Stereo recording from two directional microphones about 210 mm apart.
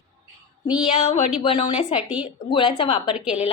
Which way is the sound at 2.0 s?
5° right (ahead or behind).